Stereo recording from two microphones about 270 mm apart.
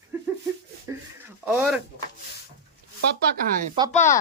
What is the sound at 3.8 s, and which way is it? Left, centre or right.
Speech, centre.